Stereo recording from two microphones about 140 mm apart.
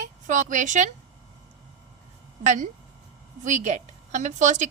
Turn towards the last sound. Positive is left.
turn(degrees=-60)  # may be behind; listen again after turning